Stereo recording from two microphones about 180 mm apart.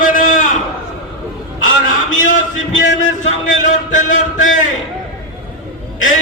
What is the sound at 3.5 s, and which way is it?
Speech, 45° left (ahead or behind).